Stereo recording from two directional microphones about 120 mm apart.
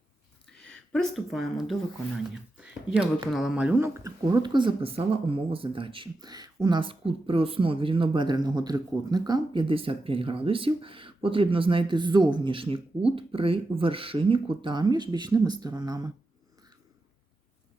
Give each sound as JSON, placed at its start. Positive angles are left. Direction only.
{"t": 0.4, "sound": "speech", "side_deg": 5}
{"t": 3.8, "sound": "speech", "side_deg": -20}